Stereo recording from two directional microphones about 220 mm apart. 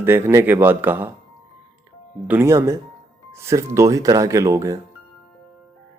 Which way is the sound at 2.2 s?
10° right (ahead or behind).